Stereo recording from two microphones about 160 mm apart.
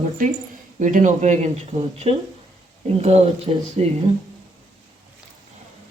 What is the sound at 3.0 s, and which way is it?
Speech, 40° right (ahead or behind).